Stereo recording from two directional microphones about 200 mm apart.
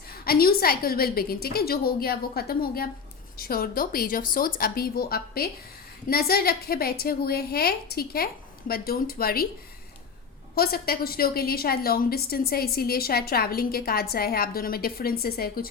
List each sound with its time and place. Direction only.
0.3 s a woman's voice: 50° left (ahead or behind)
10.5 s a woman's voice: 50° left (ahead or behind)